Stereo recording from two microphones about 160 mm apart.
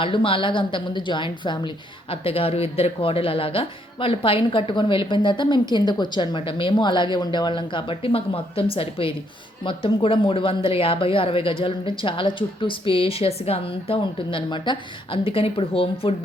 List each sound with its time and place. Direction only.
0.0 s a woman's voice: 35° left (ahead or behind)